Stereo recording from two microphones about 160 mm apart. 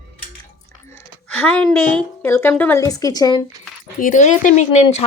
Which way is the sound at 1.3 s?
10° left (ahead or behind).